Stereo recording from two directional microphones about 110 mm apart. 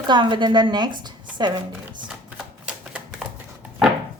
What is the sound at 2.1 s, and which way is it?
Typewriter, 10° right (ahead or behind).